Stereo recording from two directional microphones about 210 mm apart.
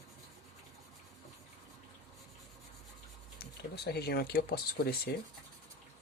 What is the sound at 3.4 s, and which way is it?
Speech, 50° left (ahead or behind).